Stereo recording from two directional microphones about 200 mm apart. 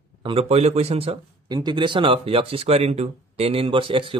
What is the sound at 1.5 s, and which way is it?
Speech, 20° right (ahead or behind).